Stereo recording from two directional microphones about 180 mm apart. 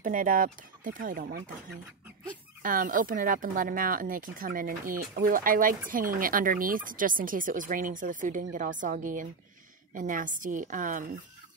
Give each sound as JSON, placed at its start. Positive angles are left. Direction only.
{"t": 0.0, "sound": "speech", "side_deg": -50}
{"t": 2.6, "sound": "speech", "side_deg": -50}